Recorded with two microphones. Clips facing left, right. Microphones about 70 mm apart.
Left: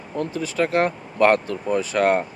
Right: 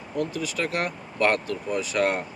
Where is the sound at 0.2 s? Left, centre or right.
Left.